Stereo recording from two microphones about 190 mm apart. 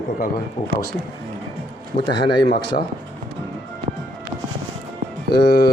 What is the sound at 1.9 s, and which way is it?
Speech, 45° left (ahead or behind).